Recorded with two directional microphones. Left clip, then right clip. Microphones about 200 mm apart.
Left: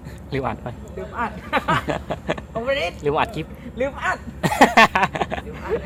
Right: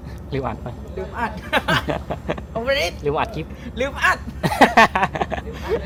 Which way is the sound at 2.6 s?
15° right (ahead or behind).